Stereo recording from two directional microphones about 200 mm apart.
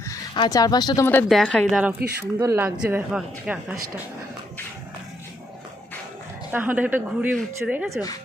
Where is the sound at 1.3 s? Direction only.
5° left (ahead or behind).